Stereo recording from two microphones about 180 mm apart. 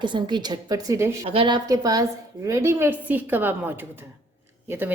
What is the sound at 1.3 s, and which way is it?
A woman's voice, 30° right (ahead or behind).